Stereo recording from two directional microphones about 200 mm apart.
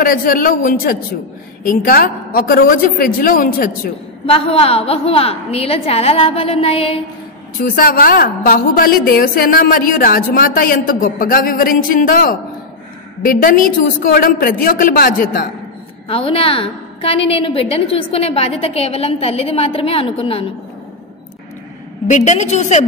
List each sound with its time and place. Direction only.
0.0 s a woman's voice: 45° left (ahead or behind)
4.3 s a woman's voice: 30° left (ahead or behind)
7.5 s a woman's voice: 45° left (ahead or behind)
16.1 s a woman's voice: 25° left (ahead or behind)
22.0 s a woman's voice: 35° left (ahead or behind)